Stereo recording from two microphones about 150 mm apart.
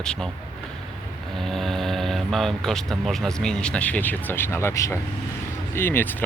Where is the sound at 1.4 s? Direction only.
Centre (ahead or behind).